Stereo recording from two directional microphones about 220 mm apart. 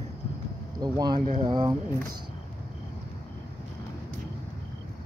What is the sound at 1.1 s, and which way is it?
Speech, 40° right (ahead or behind).